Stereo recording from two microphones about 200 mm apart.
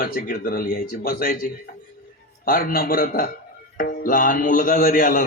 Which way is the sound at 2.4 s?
45° left (ahead or behind).